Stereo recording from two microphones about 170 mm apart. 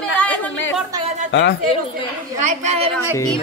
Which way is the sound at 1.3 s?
90° left.